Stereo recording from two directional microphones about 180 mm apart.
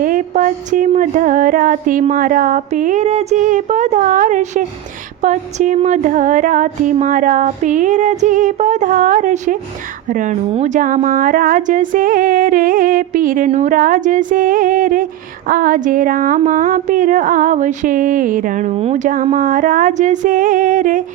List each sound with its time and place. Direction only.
0.0 s speech: 50° right (ahead or behind)